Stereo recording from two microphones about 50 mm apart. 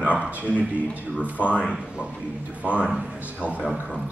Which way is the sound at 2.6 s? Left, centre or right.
Right.